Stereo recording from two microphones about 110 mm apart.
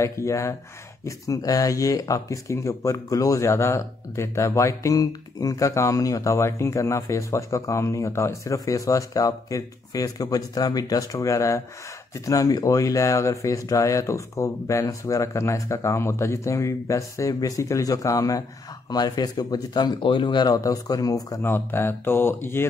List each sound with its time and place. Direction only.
0.0 s speech: 25° left (ahead or behind)
21.4 s speech: 20° left (ahead or behind)